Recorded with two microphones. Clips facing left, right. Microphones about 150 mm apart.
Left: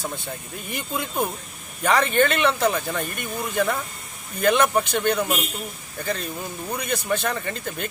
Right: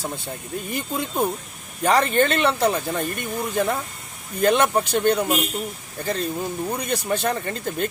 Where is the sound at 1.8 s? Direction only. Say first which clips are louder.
Right 1 dB; 35° right (ahead or behind).